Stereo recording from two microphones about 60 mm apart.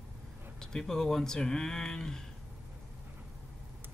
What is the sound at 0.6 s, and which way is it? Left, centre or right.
Speech, centre.